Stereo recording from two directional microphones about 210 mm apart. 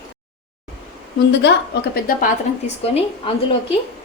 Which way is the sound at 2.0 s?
40° left (ahead or behind).